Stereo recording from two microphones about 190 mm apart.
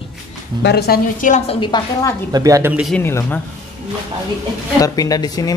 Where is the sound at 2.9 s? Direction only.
10° left (ahead or behind).